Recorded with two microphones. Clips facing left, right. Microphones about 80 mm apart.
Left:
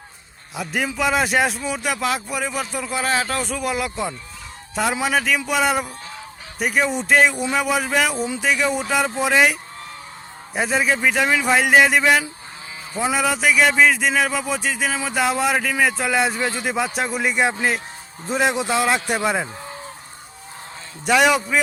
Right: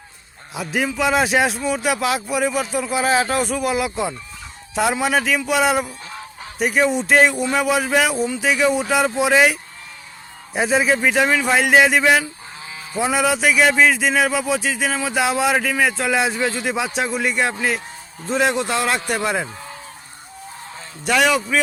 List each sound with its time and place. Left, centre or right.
0.5 s speech: centre
21.1 s a man's voice: centre